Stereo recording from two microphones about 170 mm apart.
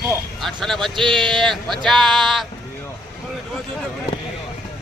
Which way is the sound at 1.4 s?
Centre (ahead or behind).